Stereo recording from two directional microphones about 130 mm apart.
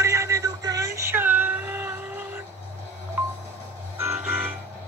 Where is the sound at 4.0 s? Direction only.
15° right (ahead or behind).